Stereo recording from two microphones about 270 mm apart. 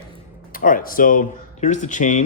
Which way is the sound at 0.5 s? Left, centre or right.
Left.